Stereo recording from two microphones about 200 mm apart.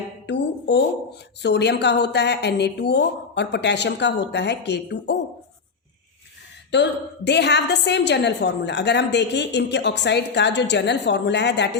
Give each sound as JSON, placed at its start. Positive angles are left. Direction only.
{"t": 0.3, "sound": "a sound", "side_deg": 60}
{"t": 1.4, "sound": "a woman's voice", "side_deg": 55}
{"t": 6.7, "sound": "a woman's voice", "side_deg": 60}